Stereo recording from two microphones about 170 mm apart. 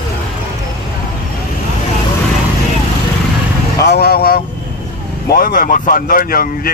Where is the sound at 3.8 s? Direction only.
70° left (ahead or behind).